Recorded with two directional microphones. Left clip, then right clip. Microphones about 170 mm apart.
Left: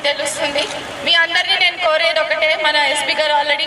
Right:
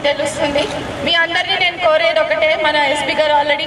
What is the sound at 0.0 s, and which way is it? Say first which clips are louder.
Speech: right 2 dB; 10° right (ahead or behind).